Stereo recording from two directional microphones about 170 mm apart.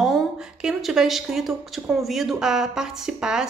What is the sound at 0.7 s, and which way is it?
Speech, centre (ahead or behind).